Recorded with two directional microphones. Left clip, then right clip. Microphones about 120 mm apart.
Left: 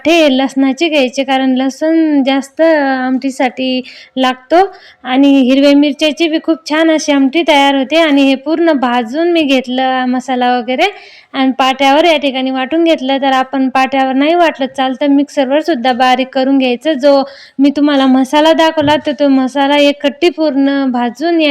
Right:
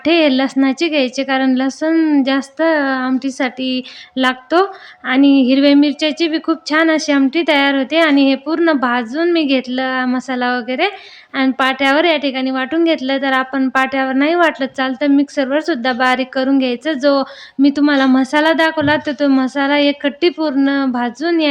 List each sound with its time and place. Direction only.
0.0 s a woman's voice: 20° left (ahead or behind)
2.0 s a woman's voice: 5° left (ahead or behind)
2.2 s speech: 20° left (ahead or behind)